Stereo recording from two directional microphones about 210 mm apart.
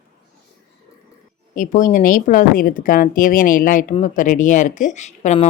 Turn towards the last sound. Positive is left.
turn(degrees=35)  # may be behind; listen again after turning